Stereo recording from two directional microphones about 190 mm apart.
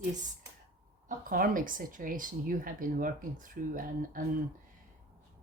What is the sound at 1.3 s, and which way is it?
Speech, 45° right (ahead or behind).